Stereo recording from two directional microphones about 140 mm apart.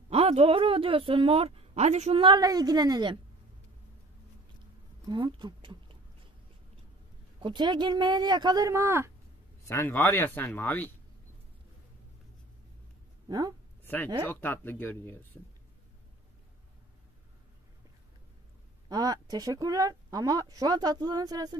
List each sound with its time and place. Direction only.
0.1 s a woman's voice: 45° right (ahead or behind); by 3.2 s 30° right (ahead or behind)
5.0 s speech: 35° right (ahead or behind)
7.3 s a woman's voice: 35° right (ahead or behind)
9.7 s speech: 15° left (ahead or behind)
13.3 s speech: 25° right (ahead or behind)
13.8 s speech: 15° left (ahead or behind)
18.9 s speech: 25° right (ahead or behind)